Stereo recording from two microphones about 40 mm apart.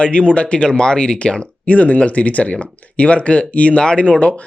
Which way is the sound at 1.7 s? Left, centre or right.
Left.